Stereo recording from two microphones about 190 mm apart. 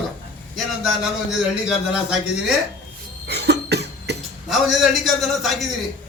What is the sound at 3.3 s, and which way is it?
Cough, 60° right (ahead or behind).